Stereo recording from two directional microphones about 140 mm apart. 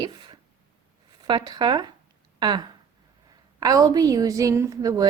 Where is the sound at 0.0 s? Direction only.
30° right (ahead or behind).